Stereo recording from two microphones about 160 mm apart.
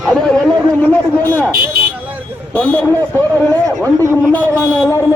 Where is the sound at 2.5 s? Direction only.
10° left (ahead or behind).